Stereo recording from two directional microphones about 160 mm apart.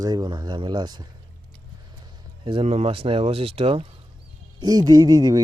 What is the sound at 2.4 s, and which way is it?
Speech, 35° right (ahead or behind).